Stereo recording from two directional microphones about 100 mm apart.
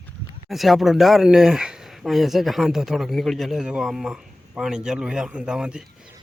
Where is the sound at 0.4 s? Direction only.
Centre (ahead or behind).